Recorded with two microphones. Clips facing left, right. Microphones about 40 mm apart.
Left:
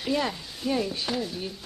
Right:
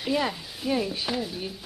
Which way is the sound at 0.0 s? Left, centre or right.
Centre.